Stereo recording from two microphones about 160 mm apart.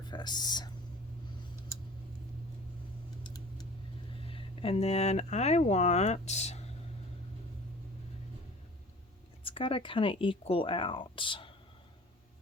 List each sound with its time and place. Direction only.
0.1 s whispering: 25° left (ahead or behind)
3.2 s a sound: 25° left (ahead or behind)
4.3 s speech: 35° left (ahead or behind)
9.4 s speech: 35° left (ahead or behind)